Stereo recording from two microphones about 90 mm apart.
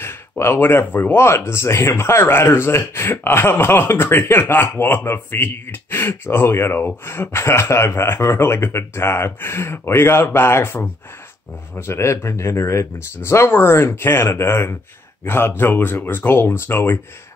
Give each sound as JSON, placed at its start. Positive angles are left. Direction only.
{"t": 0.0, "sound": "speech", "side_deg": 25}